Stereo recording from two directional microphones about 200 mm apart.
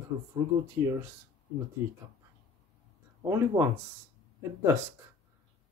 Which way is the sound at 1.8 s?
10° right (ahead or behind).